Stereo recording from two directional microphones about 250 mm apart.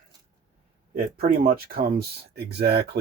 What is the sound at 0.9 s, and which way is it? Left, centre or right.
Speech, right.